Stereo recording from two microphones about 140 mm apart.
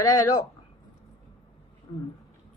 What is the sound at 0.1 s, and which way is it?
Speech, 25° left (ahead or behind).